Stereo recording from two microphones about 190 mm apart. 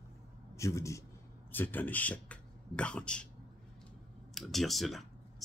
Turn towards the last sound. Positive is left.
turn(degrees=0)  # may be behind; listen again after turning